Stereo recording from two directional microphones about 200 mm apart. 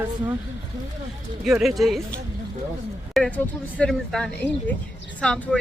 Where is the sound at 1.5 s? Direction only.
Centre (ahead or behind).